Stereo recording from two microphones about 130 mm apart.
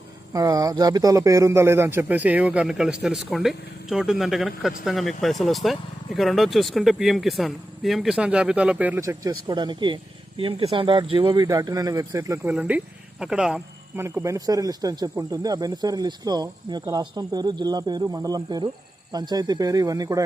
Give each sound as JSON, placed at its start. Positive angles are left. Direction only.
{"t": 0.3, "sound": "a man's voice", "side_deg": -25}
{"t": 9.0, "sound": "speech", "side_deg": -25}
{"t": 11.4, "sound": "speech", "side_deg": -30}
{"t": 12.5, "sound": "speech", "side_deg": -10}
{"t": 13.9, "sound": "speech", "side_deg": -20}